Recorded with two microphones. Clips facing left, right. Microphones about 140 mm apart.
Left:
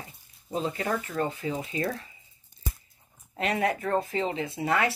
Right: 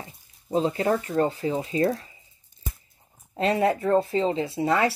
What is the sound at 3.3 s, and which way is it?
Speech, 30° right (ahead or behind).